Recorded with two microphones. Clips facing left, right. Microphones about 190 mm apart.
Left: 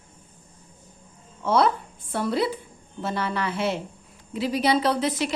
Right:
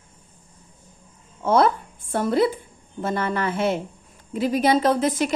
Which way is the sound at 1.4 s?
50° right (ahead or behind).